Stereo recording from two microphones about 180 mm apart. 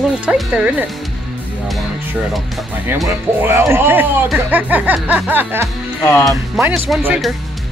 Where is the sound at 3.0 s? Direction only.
10° right (ahead or behind).